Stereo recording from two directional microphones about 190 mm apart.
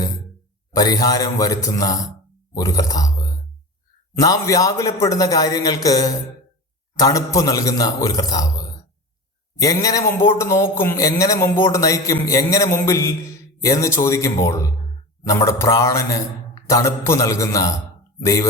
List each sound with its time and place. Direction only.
0.7 s a man's voice: 20° left (ahead or behind)
9.6 s a man's voice: 20° left (ahead or behind)